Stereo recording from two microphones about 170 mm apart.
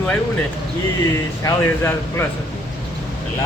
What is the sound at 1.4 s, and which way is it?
Speech, 15° left (ahead or behind).